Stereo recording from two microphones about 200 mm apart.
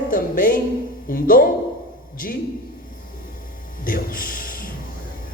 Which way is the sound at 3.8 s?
45° left (ahead or behind).